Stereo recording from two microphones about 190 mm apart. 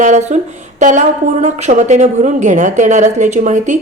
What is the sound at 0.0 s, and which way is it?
Speech, 40° right (ahead or behind).